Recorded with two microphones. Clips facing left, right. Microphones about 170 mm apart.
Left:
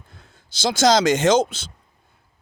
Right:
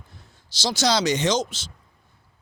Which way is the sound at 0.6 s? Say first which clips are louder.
Left 5 dB; 50° left (ahead or behind).